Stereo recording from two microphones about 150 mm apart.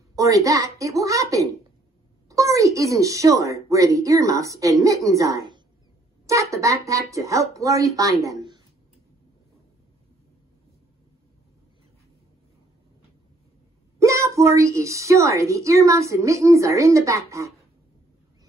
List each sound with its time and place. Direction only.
0.1 s a woman's voice: 20° right (ahead or behind)
13.9 s a woman's voice: 20° right (ahead or behind)